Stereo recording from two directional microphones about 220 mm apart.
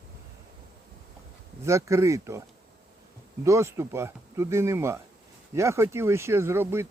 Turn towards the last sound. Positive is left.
turn(degrees=-10)  # may be behind; listen again after turning